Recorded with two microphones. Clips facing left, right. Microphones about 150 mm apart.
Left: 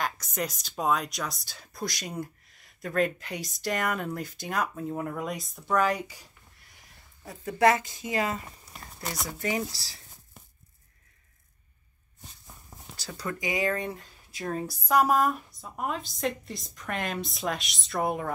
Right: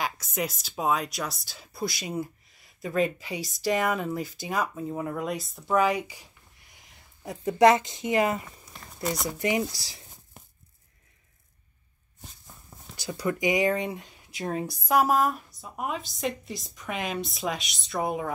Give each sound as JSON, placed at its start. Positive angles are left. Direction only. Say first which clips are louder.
{"t": 0.0, "sound": "speech", "louder": "right 1 dB", "side_deg": -5}
{"t": 7.2, "sound": "a woman's voice", "louder": "right 4 dB", "side_deg": -15}
{"t": 9.0, "sound": "speech", "louder": "right 5 dB", "side_deg": -10}
{"t": 12.9, "sound": "speech", "louder": "right 6 dB", "side_deg": -15}
{"t": 14.9, "sound": "speech", "louder": "even", "side_deg": -5}